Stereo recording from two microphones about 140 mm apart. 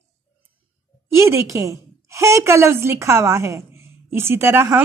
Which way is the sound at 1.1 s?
20° right (ahead or behind).